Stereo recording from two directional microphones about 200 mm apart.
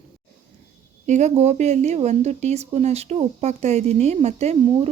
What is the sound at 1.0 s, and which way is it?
Speech, 35° right (ahead or behind).